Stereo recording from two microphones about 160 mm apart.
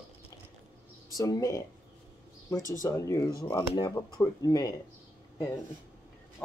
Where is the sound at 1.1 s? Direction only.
20° left (ahead or behind).